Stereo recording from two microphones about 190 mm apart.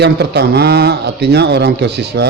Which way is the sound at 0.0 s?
60° right (ahead or behind).